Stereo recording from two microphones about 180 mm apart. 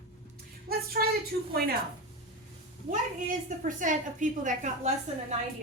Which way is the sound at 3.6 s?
45° right (ahead or behind).